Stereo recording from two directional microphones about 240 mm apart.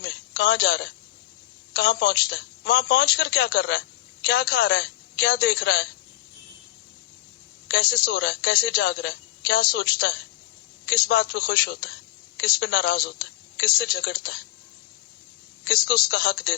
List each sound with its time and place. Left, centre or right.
0.0 s a sound: left
1.7 s a woman's voice: left
7.7 s a woman's voice: left
15.6 s a woman's voice: left